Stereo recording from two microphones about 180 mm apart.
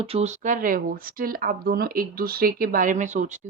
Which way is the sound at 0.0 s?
35° right (ahead or behind).